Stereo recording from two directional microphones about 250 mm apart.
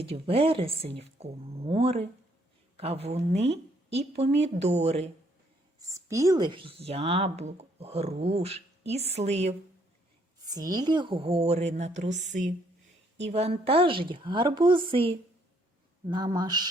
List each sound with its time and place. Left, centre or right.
0.0 s speech: right
5.8 s speech: centre
10.4 s speech: centre
16.0 s a sound: centre